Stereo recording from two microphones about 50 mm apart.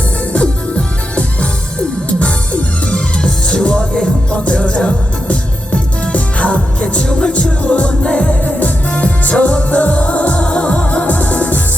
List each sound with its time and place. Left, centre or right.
0.3 s music: left